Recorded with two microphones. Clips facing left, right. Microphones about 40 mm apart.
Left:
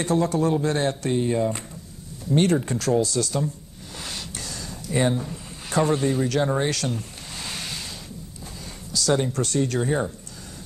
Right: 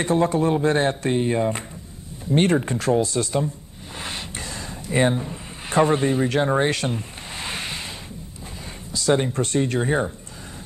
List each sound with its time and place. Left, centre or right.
0.0 s speech: right
4.0 s a sound: right
8.9 s speech: right